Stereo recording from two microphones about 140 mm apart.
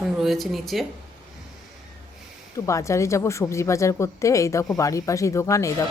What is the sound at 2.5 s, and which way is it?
A woman's voice, 20° left (ahead or behind).